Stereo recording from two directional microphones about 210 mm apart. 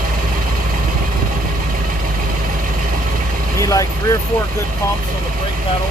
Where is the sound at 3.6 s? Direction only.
15° left (ahead or behind).